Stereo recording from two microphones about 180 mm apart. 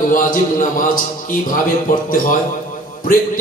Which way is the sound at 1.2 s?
50° left (ahead or behind).